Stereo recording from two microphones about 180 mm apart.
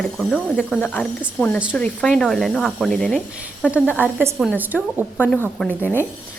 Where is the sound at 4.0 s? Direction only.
10° right (ahead or behind).